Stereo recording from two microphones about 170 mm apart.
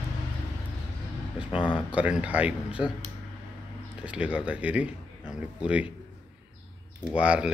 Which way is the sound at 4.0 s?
10° right (ahead or behind).